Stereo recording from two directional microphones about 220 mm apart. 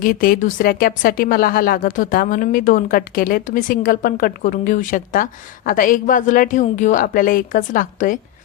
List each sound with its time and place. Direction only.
0.0 s speech: 40° left (ahead or behind)